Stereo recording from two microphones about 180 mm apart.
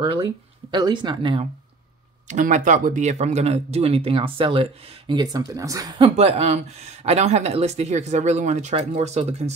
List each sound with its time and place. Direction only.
0.7 s speech: 25° right (ahead or behind)
2.2 s speech: 45° right (ahead or behind)